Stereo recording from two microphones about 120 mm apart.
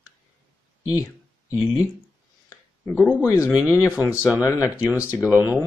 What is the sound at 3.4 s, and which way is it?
Speech, 10° right (ahead or behind).